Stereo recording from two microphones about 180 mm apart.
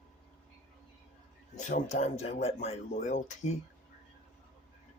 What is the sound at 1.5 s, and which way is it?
Speech, 40° left (ahead or behind).